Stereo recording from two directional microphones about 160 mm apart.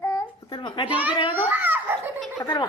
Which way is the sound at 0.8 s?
10° right (ahead or behind).